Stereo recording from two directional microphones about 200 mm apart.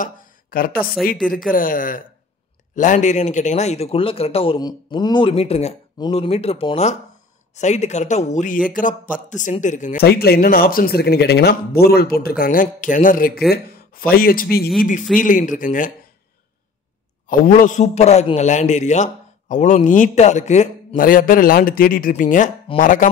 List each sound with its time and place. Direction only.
0.0 s a sound: 45° left (ahead or behind)
1.5 s a man's voice: 45° left (ahead or behind)
17.3 s a man's voice: 40° left (ahead or behind)